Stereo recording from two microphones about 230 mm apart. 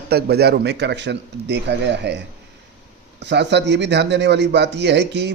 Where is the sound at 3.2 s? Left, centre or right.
Right.